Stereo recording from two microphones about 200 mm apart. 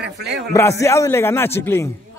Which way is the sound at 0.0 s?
55° right (ahead or behind).